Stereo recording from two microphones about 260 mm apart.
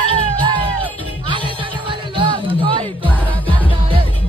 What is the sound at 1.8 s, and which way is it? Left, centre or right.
Music, centre.